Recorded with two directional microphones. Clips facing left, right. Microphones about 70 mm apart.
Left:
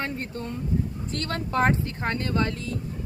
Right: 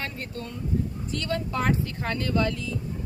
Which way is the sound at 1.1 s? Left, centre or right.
Left.